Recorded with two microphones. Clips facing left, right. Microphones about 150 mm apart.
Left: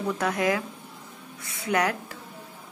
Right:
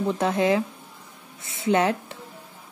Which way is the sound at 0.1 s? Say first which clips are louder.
Right 3 dB; 25° right (ahead or behind).